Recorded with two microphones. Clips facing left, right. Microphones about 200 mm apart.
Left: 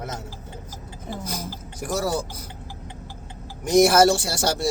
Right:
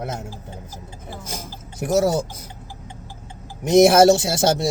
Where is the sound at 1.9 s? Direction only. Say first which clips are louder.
Right 7 dB; 20° right (ahead or behind).